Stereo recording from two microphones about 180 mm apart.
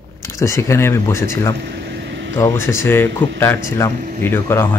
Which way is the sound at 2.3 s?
15° left (ahead or behind).